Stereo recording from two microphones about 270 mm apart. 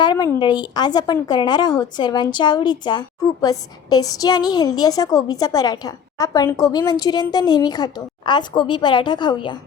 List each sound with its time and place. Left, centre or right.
0.0 s a woman's voice: centre